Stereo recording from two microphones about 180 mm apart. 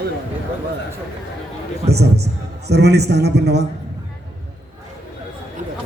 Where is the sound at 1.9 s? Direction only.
65° right (ahead or behind).